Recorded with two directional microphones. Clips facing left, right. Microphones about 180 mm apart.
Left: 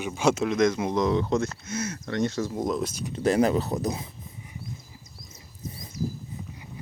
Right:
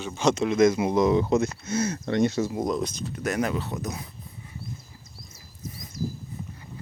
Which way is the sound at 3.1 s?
30° left (ahead or behind).